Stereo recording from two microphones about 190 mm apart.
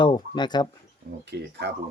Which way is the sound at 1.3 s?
65° right (ahead or behind).